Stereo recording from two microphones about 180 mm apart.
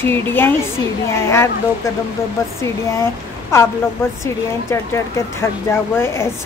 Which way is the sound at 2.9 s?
15° left (ahead or behind).